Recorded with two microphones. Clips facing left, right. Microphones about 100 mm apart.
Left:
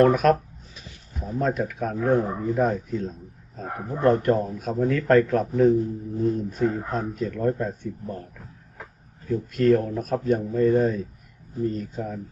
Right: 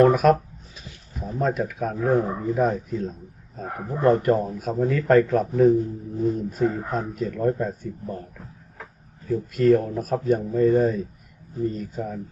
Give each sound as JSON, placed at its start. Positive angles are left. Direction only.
{"t": 0.0, "sound": "speech", "side_deg": 0}
{"t": 9.2, "sound": "speech", "side_deg": 0}